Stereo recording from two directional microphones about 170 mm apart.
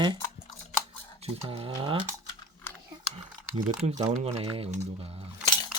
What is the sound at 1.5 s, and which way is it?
Speech, 30° right (ahead or behind).